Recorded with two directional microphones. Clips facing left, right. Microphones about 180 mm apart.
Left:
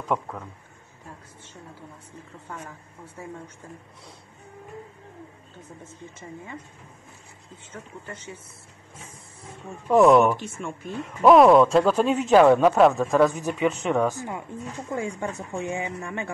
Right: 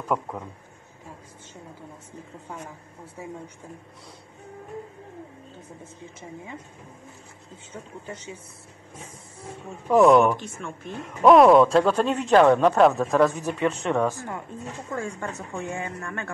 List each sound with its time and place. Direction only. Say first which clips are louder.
3.2 s speech: right 1 dB; 15° right (ahead or behind)
6.1 s speech: even; 15° right (ahead or behind)
7.7 s speech: right 2 dB; 15° right (ahead or behind)
9.8 s speech: even; centre (ahead or behind)
14.3 s speech: left 1 dB; 15° left (ahead or behind)